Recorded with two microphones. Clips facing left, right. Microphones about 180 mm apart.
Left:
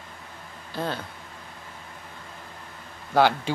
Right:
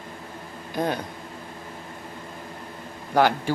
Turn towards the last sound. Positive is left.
turn(degrees=-15)  # may be behind; listen again after turning